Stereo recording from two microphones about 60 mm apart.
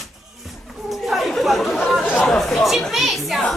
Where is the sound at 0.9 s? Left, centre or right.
Centre.